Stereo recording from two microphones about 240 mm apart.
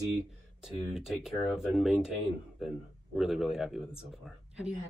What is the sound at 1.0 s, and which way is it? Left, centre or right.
Speech, centre.